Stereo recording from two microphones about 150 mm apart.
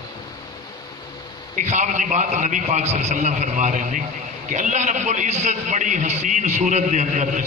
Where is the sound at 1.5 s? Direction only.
50° right (ahead or behind).